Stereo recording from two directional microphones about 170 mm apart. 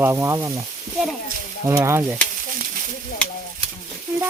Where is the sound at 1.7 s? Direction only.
15° right (ahead or behind).